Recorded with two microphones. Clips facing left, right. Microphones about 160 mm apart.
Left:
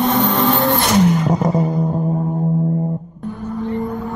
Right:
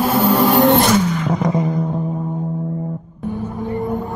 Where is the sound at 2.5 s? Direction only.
30° left (ahead or behind).